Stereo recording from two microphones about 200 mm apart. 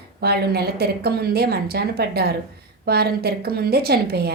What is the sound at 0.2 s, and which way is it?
A woman's voice, 55° right (ahead or behind).